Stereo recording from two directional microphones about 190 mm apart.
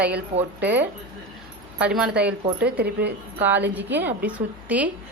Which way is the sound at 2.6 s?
55° right (ahead or behind).